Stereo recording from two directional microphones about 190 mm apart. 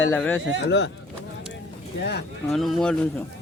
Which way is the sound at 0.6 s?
65° left (ahead or behind).